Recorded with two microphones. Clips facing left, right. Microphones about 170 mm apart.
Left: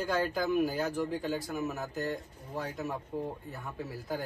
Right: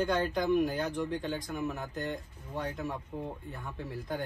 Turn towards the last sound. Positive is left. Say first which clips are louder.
# even
turn(degrees=5)  # may be behind; listen again after turning